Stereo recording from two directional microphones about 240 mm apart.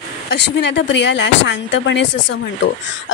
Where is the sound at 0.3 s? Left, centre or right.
Left.